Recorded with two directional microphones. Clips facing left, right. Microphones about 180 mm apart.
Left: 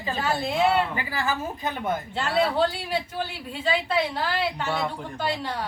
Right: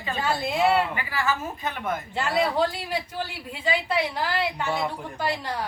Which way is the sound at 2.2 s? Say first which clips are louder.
Even; 10° right (ahead or behind).